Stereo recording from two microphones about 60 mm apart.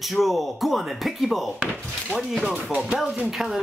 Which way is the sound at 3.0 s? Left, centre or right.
Centre.